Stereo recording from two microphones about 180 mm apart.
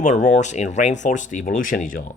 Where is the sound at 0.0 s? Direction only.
40° left (ahead or behind).